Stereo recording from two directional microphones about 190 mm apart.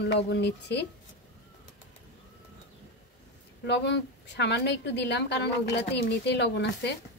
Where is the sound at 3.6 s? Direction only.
65° left (ahead or behind).